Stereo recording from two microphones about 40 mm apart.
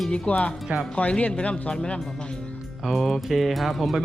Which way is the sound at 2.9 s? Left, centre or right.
Centre.